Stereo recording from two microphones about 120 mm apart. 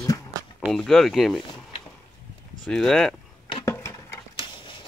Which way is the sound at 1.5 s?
45° left (ahead or behind).